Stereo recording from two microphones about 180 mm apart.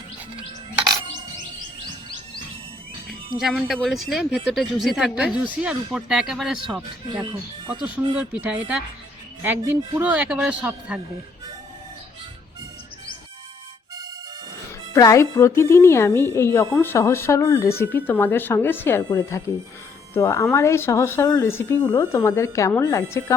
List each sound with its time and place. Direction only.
3.4 s a man's voice: centre (ahead or behind)
14.9 s a woman's voice: 20° left (ahead or behind)